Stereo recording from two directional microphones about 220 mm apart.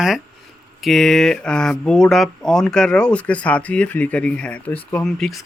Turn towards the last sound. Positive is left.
turn(degrees=0)  # may be behind; listen again after turning